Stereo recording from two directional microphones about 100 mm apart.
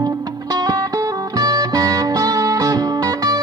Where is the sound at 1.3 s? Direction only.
40° right (ahead or behind).